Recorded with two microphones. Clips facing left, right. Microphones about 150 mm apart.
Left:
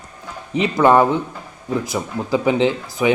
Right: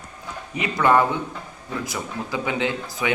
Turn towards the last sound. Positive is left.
turn(degrees=25)  # may be behind; listen again after turning